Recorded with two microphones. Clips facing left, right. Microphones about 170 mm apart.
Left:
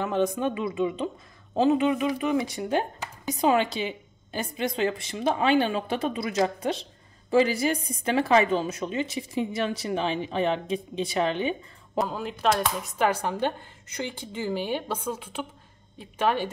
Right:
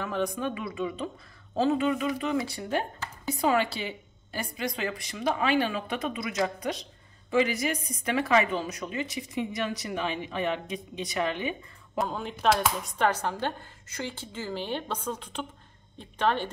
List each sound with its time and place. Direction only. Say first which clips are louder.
0.0 s a woman's voice: left 5 dB; 20° left (ahead or behind)
12.0 s speech: left 2 dB; centre (ahead or behind)